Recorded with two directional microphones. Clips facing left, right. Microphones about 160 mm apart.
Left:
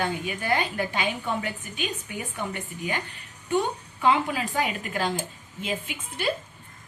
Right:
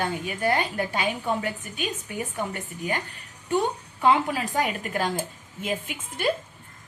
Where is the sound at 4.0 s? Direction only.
40° right (ahead or behind).